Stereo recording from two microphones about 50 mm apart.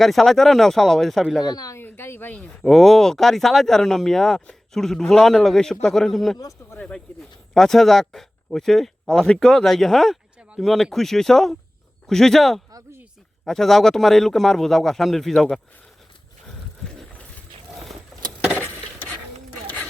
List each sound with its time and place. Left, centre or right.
0.0 s a man's voice: centre
1.2 s a man's voice: centre
1.8 s a sound: left
2.6 s speech: centre
9.0 s a man's voice: centre
19.6 s a sound: left